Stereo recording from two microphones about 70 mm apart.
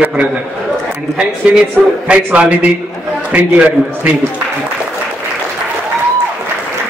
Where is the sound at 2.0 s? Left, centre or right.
Centre.